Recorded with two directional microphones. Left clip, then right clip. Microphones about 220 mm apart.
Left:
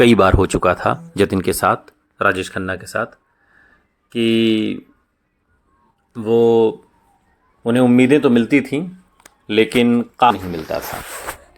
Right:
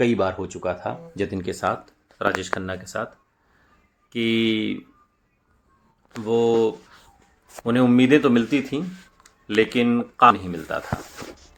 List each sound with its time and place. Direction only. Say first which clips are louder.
0.0 s speech: left 10 dB; 35° left (ahead or behind)
4.1 s speech: left 6 dB; 20° left (ahead or behind)
6.2 s speech: left 6 dB; 25° left (ahead or behind)
7.9 s speech: left 3 dB; 25° left (ahead or behind)
9.5 s speech: left 5 dB; 20° left (ahead or behind)